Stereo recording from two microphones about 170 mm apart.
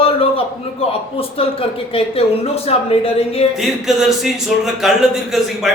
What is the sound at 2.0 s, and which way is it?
Speech, 35° left (ahead or behind).